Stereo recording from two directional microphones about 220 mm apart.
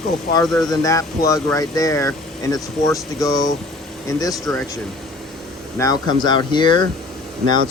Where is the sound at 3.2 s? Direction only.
15° left (ahead or behind).